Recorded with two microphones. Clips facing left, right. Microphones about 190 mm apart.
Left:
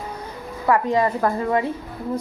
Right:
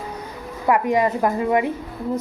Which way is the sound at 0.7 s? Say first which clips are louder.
Right 1 dB; 15° right (ahead or behind).